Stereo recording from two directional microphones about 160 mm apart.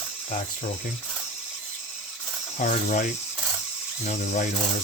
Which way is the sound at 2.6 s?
50° left (ahead or behind).